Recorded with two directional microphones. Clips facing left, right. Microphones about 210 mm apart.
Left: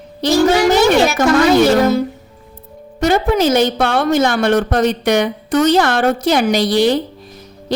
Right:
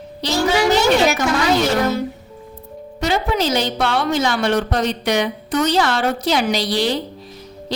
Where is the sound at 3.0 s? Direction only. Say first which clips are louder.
Left 6 dB; 50° left (ahead or behind).